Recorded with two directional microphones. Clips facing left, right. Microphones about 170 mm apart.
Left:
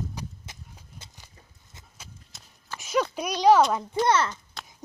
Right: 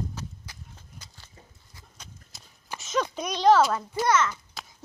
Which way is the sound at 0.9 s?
25° left (ahead or behind).